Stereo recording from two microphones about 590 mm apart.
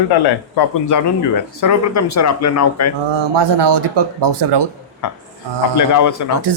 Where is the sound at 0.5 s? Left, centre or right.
Left.